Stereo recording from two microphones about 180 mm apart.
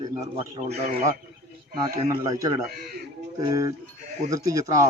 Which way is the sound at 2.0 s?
20° right (ahead or behind).